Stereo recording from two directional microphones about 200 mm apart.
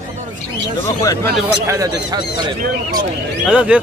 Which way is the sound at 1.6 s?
15° right (ahead or behind).